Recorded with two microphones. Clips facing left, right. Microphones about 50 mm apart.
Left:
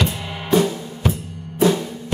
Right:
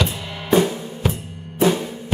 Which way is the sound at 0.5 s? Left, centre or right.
Centre.